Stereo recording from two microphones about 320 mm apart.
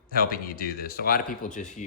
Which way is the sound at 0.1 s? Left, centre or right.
Left.